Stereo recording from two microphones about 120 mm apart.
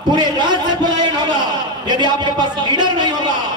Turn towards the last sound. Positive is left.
turn(degrees=-40)  # may be behind; listen again after turning